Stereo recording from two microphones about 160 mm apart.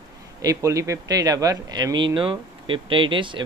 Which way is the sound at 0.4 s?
20° right (ahead or behind).